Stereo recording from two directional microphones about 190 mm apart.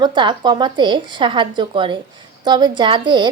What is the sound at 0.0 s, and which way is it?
A woman's voice, 25° right (ahead or behind).